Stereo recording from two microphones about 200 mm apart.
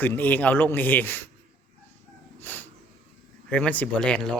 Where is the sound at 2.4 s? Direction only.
10° left (ahead or behind).